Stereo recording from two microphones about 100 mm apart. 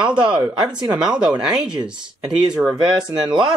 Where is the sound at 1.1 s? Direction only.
10° right (ahead or behind).